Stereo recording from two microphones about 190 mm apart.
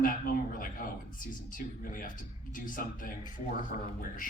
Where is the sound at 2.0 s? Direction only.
45° left (ahead or behind).